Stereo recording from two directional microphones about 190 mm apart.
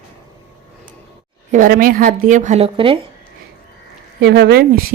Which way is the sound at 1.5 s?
45° right (ahead or behind).